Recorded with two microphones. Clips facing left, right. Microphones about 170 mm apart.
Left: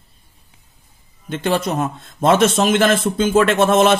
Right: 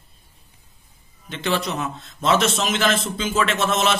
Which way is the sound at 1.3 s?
45° left (ahead or behind).